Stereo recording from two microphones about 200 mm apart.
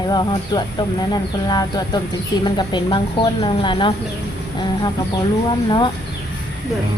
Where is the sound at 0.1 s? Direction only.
20° left (ahead or behind).